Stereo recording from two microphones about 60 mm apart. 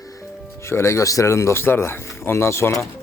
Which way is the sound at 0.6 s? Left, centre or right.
Left.